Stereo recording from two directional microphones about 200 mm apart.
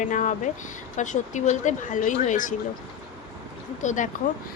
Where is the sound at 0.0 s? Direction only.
40° left (ahead or behind).